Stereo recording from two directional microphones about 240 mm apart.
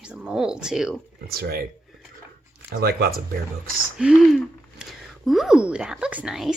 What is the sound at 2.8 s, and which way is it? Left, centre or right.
Speech, right.